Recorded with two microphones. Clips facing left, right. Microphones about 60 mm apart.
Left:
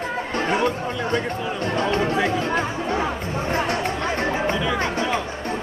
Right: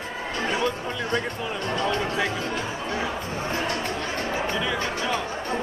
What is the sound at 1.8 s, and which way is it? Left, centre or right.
Speech, left.